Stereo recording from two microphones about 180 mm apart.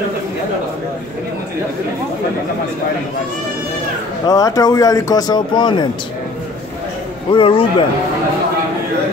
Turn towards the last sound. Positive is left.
turn(degrees=30)  # may be behind; listen again after turning